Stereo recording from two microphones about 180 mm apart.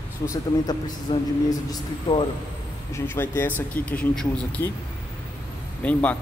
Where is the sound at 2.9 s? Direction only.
15° left (ahead or behind).